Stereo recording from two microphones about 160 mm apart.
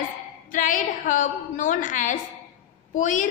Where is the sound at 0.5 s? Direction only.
55° left (ahead or behind).